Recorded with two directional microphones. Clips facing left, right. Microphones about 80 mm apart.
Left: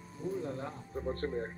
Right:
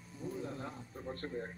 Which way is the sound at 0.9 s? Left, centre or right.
Left.